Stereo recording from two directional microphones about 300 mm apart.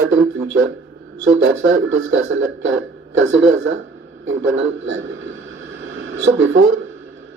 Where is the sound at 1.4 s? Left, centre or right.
Right.